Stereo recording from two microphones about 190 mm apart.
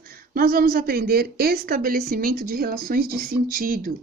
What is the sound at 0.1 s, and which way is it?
A woman's voice, 50° right (ahead or behind).